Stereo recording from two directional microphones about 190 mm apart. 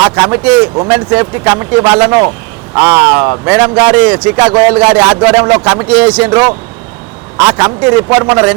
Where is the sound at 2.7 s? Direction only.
20° right (ahead or behind).